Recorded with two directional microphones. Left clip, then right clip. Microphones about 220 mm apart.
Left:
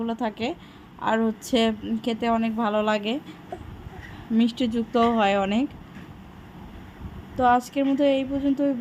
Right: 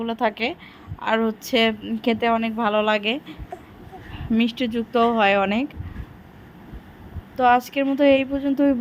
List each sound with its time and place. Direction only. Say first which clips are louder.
0.0 s a woman's voice: right 5 dB; 20° right (ahead or behind)
4.4 s a woman's voice: right 1 dB; 20° right (ahead or behind)
7.3 s a woman's voice: right 3 dB; 20° right (ahead or behind)